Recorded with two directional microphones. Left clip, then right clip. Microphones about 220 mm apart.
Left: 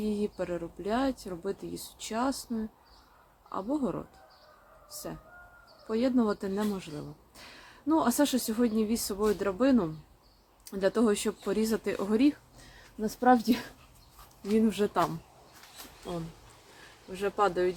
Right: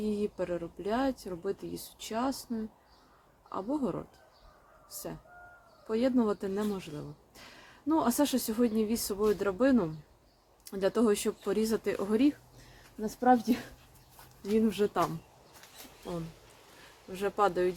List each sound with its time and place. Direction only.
0.0 s a woman's voice: 10° right (ahead or behind)
3.5 s a woman's voice: 10° right (ahead or behind)
5.9 s a woman's voice: 10° right (ahead or behind)
17.1 s a woman's voice: 15° right (ahead or behind)